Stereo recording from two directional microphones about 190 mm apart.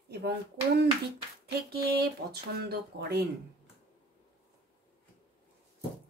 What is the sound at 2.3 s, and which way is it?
Speech, 55° right (ahead or behind).